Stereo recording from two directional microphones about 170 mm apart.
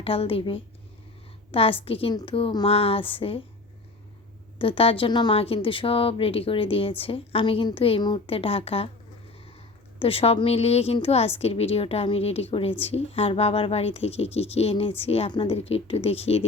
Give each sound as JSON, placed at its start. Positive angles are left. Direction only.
{"t": 0.0, "sound": "speech", "side_deg": 35}
{"t": 4.5, "sound": "speech", "side_deg": 30}
{"t": 10.0, "sound": "speech", "side_deg": 35}